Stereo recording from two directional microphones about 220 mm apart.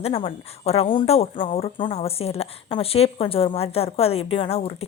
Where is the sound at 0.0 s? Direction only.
25° left (ahead or behind).